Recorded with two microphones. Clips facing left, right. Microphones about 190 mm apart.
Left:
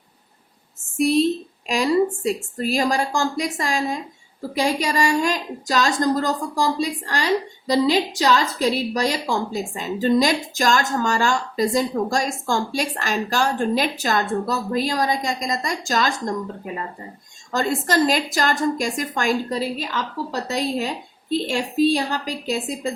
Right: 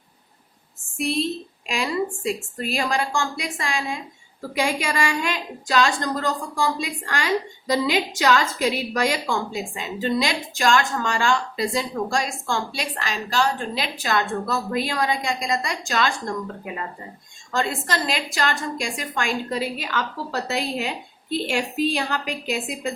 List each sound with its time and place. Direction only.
0.9 s a woman's voice: 40° left (ahead or behind)
17.5 s a woman's voice: 40° left (ahead or behind)
20.7 s a woman's voice: 40° left (ahead or behind)